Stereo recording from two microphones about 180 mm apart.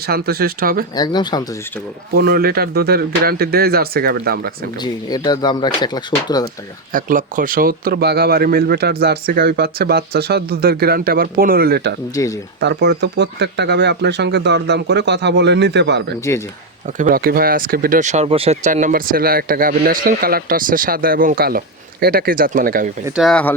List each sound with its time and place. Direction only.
0.1 s speech: 60° right (ahead or behind)
0.9 s speech: 25° left (ahead or behind)
2.1 s speech: 60° right (ahead or behind)
4.8 s speech: 20° left (ahead or behind)
6.9 s speech: 50° right (ahead or behind); by 11.9 s 65° right (ahead or behind)
12.1 s speech: 20° left (ahead or behind)
12.5 s speech: 70° right (ahead or behind)
17.0 s speech: 50° right (ahead or behind)
23.1 s speech: centre (ahead or behind)